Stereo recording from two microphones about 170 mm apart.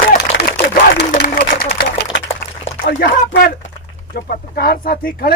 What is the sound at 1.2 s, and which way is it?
Speech, 60° left (ahead or behind).